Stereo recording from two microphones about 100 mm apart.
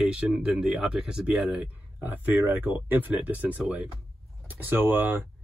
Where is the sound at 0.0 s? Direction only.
5° right (ahead or behind).